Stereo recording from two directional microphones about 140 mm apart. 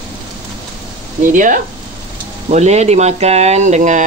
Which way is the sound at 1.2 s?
65° right (ahead or behind).